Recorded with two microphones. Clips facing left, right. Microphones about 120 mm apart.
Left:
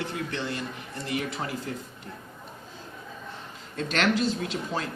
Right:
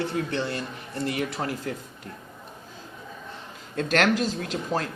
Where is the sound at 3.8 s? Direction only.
50° right (ahead or behind).